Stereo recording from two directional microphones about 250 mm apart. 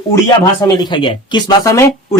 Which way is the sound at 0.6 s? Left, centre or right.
Centre.